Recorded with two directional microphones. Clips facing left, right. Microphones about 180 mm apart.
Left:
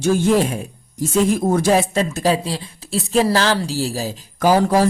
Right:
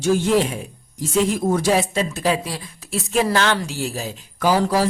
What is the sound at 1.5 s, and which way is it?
A woman's voice, 45° left (ahead or behind).